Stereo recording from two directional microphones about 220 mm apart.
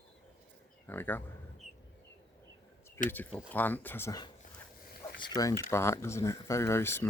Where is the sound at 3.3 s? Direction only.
5° left (ahead or behind).